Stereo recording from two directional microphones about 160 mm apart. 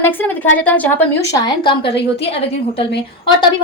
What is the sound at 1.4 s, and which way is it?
Speech, 30° left (ahead or behind).